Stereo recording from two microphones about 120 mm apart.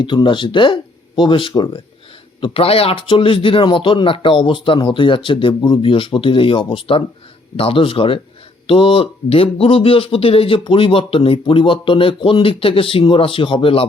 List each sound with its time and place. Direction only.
0.0 s speech: 40° left (ahead or behind)
2.4 s speech: 50° left (ahead or behind)